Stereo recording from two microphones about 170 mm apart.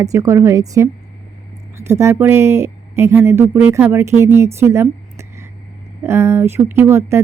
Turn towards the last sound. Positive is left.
turn(degrees=-15)  # may be behind; listen again after turning